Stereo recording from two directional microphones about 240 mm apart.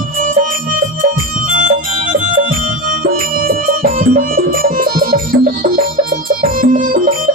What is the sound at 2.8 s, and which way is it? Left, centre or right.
Music, right.